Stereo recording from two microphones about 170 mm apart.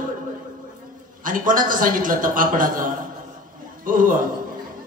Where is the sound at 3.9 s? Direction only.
55° right (ahead or behind).